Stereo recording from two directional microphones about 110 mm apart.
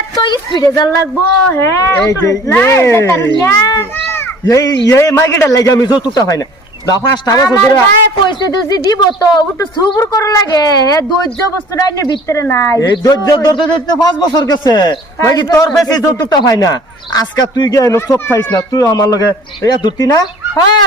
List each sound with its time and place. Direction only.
0.2 s speech: 40° left (ahead or behind)
1.5 s a child's voice: 25° left (ahead or behind)
2.5 s a child's voice: 20° left (ahead or behind); by 12.2 s 40° left (ahead or behind)
12.3 s a child's voice: 25° left (ahead or behind)